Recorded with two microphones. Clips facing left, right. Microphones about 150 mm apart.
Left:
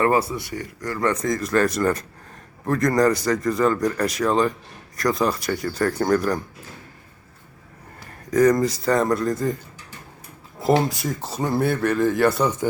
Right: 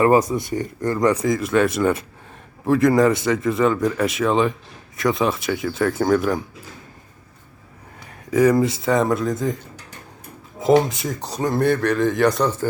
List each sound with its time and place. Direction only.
0.0 s speech: 15° right (ahead or behind)
1.0 s speech: 5° right (ahead or behind)
7.9 s a man's voice: 5° right (ahead or behind)
10.8 s speech: centre (ahead or behind)